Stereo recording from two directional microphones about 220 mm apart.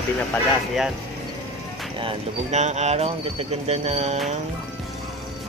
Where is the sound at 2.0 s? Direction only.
25° right (ahead or behind).